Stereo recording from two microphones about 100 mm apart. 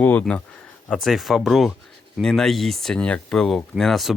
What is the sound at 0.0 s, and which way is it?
Speech, 15° left (ahead or behind).